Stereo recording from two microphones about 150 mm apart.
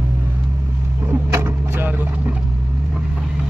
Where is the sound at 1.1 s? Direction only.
15° right (ahead or behind).